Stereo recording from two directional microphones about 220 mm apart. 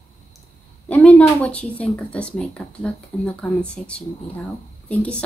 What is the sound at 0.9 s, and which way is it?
Speech, 5° left (ahead or behind).